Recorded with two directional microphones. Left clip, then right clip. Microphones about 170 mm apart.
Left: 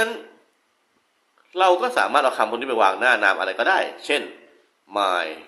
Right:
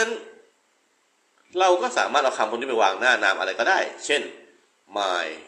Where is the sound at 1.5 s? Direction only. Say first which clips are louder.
Left 2 dB; 20° left (ahead or behind).